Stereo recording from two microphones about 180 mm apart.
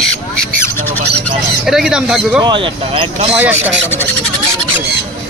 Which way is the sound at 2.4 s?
30° right (ahead or behind).